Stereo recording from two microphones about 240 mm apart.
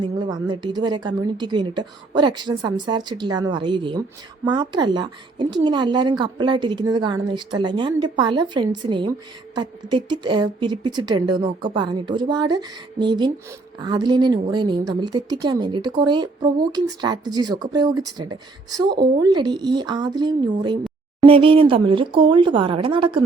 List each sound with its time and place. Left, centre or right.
0.0 s a woman's voice: centre